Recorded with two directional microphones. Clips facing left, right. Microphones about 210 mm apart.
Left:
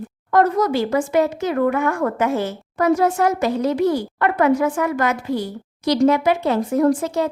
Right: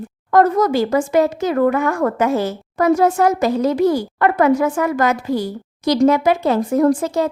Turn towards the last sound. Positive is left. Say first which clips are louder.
# right 2 dB
turn(degrees=-45)  # may be behind; listen again after turning